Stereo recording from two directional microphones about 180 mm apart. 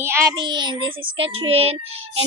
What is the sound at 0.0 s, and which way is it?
Child singing, 15° right (ahead or behind).